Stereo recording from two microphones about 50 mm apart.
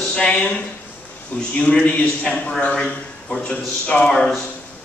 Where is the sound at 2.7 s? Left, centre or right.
Centre.